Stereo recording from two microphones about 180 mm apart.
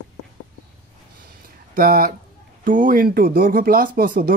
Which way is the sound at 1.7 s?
55° right (ahead or behind).